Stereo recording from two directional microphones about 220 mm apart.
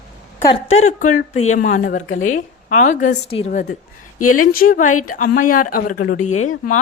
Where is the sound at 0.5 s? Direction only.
30° left (ahead or behind).